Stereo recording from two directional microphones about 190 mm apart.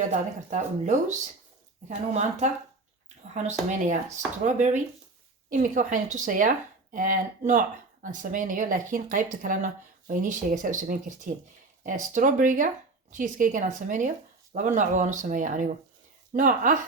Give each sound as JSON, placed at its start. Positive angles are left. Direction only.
{"t": 0.1, "sound": "speech", "side_deg": -40}
{"t": 3.3, "sound": "speech", "side_deg": -40}